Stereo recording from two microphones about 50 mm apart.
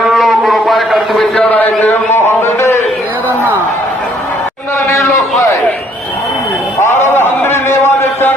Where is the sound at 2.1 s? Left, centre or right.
Left.